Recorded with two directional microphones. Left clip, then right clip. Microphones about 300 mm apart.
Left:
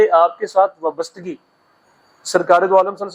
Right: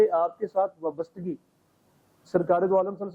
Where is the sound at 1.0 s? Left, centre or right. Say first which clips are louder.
Left 8 dB; centre.